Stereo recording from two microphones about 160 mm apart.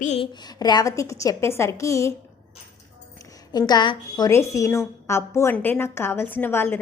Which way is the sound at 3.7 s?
25° left (ahead or behind).